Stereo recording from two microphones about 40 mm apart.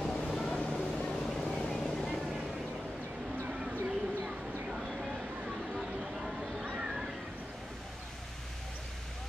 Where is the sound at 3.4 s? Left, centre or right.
Right.